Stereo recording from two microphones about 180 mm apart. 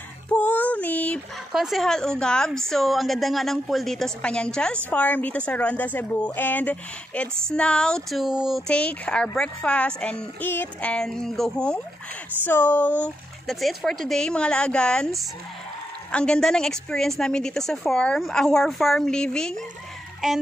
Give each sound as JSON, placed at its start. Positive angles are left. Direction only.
{"t": 0.3, "sound": "speech", "side_deg": 10}